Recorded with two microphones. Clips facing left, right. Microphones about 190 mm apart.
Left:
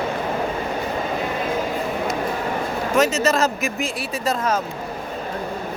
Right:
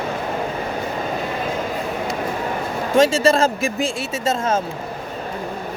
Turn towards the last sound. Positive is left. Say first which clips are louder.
# right 2 dB
turn(degrees=-25)  # may be behind; listen again after turning